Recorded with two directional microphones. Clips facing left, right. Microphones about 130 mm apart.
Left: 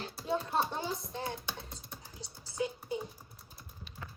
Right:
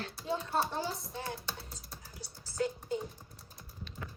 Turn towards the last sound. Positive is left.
turn(degrees=15)  # may be behind; listen again after turning